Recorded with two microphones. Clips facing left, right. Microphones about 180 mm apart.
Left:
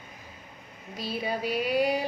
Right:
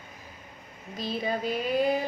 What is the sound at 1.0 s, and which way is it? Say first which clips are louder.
Female singing: right 1 dB; 10° left (ahead or behind).